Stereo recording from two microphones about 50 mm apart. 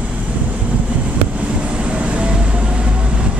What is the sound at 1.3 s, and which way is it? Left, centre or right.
Vehicle, right.